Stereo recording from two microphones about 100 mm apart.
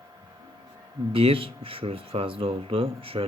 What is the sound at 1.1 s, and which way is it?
Speech, 65° right (ahead or behind).